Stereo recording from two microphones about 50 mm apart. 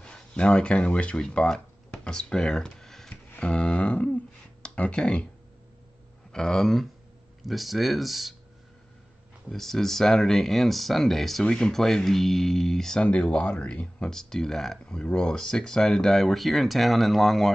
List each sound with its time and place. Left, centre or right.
0.0 s speech: centre
3.3 s speech: left
6.3 s speech: centre
9.5 s speech: centre
11.4 s speech: centre
13.0 s speech: left
14.1 s speech: centre